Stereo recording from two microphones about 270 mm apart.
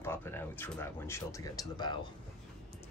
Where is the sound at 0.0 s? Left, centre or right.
Centre.